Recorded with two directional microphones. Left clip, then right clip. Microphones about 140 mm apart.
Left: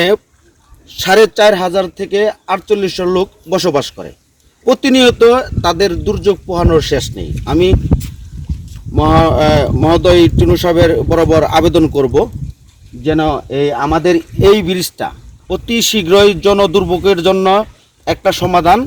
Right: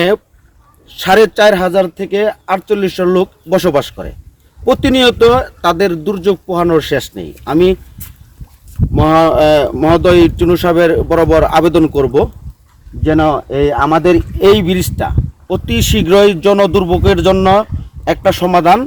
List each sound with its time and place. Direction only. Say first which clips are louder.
0.9 s speech: even; 10° right (ahead or behind)
9.0 s speech: right 1 dB; 15° right (ahead or behind)